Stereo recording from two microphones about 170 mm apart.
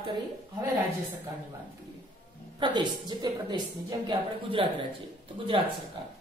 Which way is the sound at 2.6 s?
25° right (ahead or behind).